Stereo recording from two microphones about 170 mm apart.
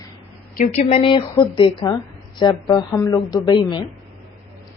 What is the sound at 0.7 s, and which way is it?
Speech, 35° left (ahead or behind).